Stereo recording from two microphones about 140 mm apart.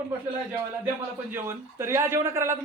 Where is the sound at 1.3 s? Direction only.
20° right (ahead or behind).